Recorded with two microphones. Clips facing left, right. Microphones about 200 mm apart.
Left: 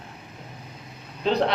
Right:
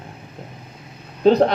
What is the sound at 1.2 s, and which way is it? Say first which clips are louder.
Speech: right 9 dB; 45° right (ahead or behind).